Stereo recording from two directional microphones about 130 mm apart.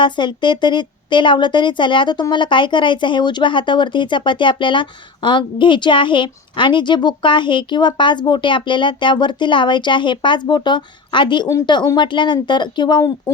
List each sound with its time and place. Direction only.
0.0 s a woman's voice: 35° left (ahead or behind)